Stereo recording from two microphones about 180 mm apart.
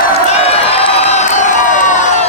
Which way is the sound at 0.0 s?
35° left (ahead or behind).